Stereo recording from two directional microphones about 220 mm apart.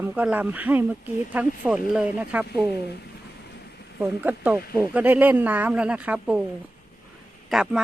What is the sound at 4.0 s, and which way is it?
A woman's voice, 10° right (ahead or behind).